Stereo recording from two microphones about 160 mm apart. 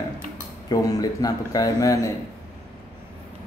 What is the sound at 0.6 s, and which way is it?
A man's voice, 20° left (ahead or behind).